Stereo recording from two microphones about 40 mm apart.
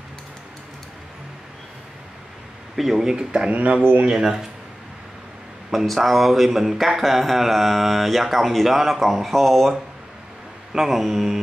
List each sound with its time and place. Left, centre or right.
2.7 s speech: centre
3.1 s speech: centre
3.5 s speech: right
4.1 s speech: centre
5.9 s a sound: centre
10.7 s speech: centre